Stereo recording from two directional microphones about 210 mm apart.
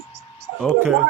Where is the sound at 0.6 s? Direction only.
Centre (ahead or behind).